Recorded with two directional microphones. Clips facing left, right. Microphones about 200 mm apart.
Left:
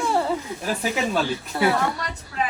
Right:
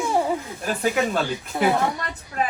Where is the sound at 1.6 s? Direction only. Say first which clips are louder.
Right 1 dB; 20° right (ahead or behind).